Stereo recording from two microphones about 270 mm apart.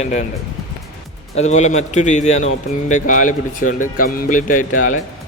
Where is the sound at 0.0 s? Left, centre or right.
Left.